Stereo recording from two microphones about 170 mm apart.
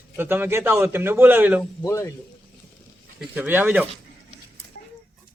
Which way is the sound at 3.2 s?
10° right (ahead or behind).